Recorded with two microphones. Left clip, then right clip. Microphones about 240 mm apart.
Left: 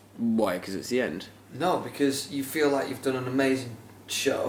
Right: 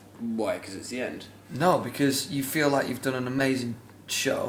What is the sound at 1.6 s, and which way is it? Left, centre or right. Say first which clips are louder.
Speech: right 2 dB; right.